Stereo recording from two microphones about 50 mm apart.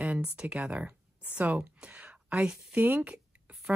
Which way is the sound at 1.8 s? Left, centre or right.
Right.